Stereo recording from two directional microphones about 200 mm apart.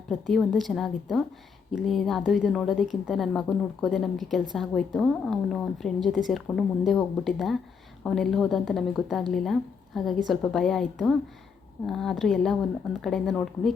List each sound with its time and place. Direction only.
0.1 s a woman's voice: centre (ahead or behind)